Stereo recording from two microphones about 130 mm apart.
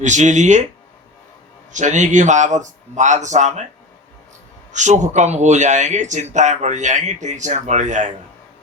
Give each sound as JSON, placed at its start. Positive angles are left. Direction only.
{"t": 0.0, "sound": "speech", "side_deg": -65}
{"t": 1.7, "sound": "speech", "side_deg": -70}
{"t": 4.7, "sound": "speech", "side_deg": -65}